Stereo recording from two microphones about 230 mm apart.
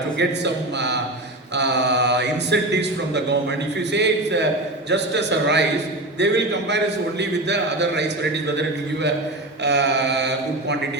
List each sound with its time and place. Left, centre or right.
0.2 s a man's voice: right
9.6 s a man's voice: right